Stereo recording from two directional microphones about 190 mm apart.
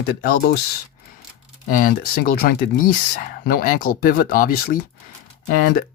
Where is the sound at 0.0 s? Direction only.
55° left (ahead or behind).